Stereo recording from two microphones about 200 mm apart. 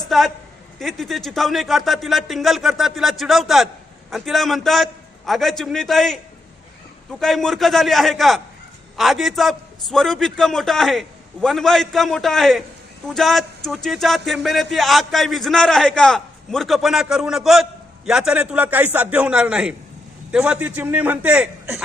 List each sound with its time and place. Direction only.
0.1 s a man's voice: centre (ahead or behind)